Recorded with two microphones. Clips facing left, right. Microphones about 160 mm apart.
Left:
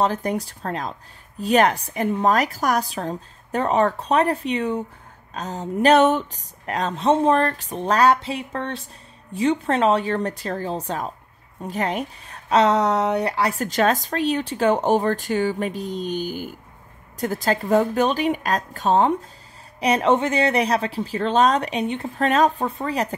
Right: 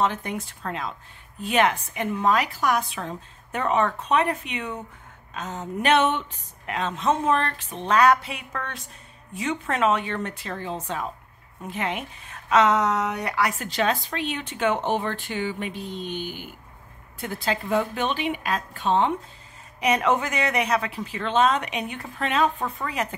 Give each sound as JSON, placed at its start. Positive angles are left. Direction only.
{"t": 0.0, "sound": "speech", "side_deg": 35}
{"t": 22.2, "sound": "speech", "side_deg": 40}